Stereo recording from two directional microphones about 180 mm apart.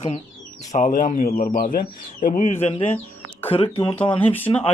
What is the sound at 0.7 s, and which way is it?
Speech, 50° left (ahead or behind).